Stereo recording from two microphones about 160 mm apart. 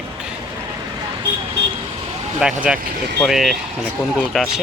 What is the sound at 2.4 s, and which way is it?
Speech, 5° right (ahead or behind).